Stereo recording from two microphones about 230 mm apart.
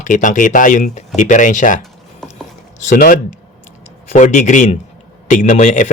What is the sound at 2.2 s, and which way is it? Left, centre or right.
Ratchet, centre.